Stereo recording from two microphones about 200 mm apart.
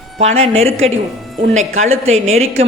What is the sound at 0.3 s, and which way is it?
Speech, 80° right.